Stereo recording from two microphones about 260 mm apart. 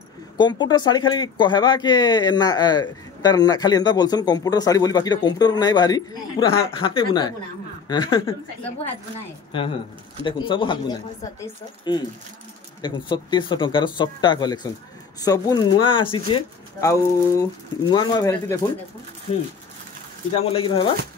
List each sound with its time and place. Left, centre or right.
0.4 s speech: centre
9.5 s speech: centre
20.5 s speech: centre